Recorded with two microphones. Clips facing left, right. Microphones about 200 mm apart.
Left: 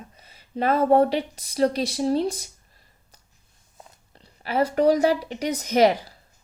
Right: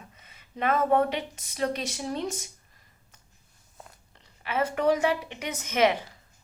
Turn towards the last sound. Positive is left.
turn(degrees=35)  # may be behind; listen again after turning